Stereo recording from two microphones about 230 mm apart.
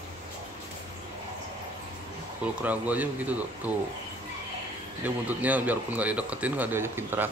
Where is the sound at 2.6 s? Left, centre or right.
Centre.